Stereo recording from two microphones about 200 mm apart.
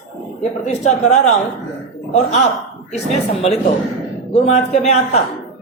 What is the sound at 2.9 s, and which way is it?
Speech, 30° left (ahead or behind).